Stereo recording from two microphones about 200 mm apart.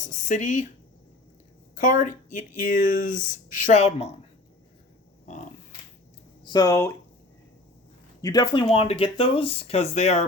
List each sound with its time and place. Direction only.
0.1 s speech: 35° left (ahead or behind)
1.8 s speech: 40° left (ahead or behind)
6.4 s speech: 20° left (ahead or behind)
8.2 s speech: 20° left (ahead or behind)